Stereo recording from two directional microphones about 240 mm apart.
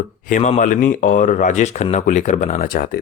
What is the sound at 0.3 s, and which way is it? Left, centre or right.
A man's voice, left.